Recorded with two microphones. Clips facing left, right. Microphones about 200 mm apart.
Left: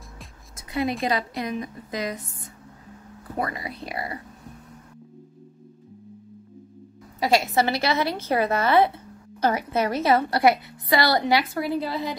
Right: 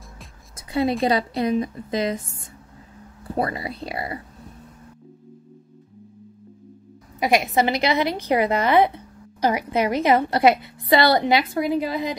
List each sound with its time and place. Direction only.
0.6 s a sound: 30° right (ahead or behind)
1.0 s a woman's voice: 30° right (ahead or behind)
7.2 s a woman's voice: 15° right (ahead or behind)